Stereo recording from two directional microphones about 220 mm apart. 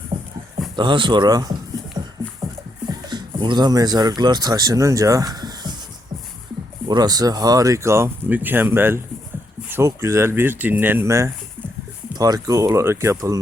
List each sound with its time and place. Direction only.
0.1 s horse: 20° right (ahead or behind)
0.8 s speech: 20° right (ahead or behind)
2.0 s music: 20° right (ahead or behind)
3.1 s speech: 20° right (ahead or behind)
6.8 s speech: 20° right (ahead or behind)